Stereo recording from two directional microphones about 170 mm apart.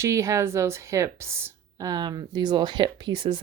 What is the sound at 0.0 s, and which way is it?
A woman's voice, 15° right (ahead or behind).